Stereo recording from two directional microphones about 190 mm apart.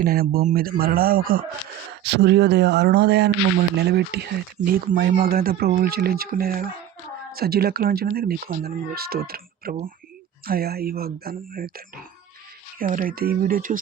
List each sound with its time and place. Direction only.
0.0 s speech: 50° right (ahead or behind)
2.0 s speech: 60° right (ahead or behind)